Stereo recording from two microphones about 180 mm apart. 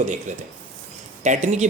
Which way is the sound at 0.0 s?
40° right (ahead or behind).